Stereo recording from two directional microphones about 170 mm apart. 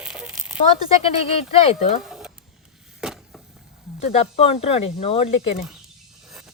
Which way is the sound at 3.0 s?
5° right (ahead or behind).